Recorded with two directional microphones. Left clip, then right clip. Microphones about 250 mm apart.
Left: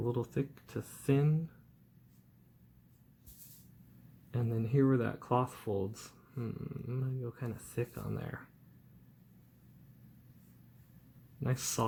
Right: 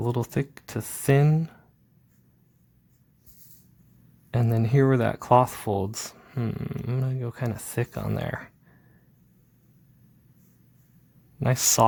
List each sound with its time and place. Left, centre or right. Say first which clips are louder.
0.0 s speech: right 7 dB; right
4.3 s speech: right 10 dB; right
11.3 s speech: right 15 dB; right